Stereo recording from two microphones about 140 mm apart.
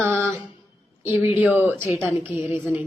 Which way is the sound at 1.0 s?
15° right (ahead or behind).